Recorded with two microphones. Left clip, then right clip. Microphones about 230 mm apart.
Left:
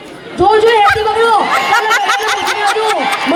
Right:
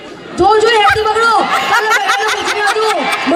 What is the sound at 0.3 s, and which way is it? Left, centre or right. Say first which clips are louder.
Speech: left 1 dB; right.